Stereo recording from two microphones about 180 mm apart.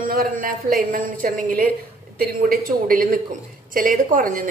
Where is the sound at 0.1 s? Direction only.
50° right (ahead or behind).